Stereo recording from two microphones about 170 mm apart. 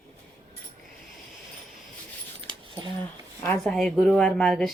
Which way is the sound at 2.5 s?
30° right (ahead or behind).